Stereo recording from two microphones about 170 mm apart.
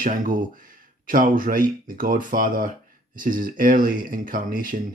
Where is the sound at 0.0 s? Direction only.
55° right (ahead or behind).